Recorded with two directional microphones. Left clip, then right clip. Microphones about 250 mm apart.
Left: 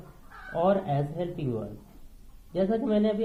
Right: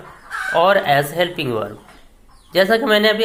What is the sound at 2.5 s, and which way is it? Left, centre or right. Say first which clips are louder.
Speech: right 13 dB; right.